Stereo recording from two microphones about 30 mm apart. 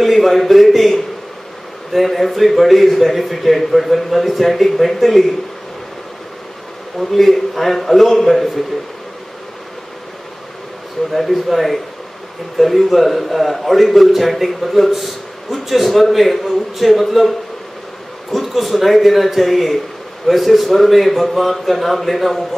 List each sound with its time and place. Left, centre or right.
0.0 s a sound: centre
1.9 s a man's voice: centre
7.0 s a man's voice: centre
11.1 s a man's voice: centre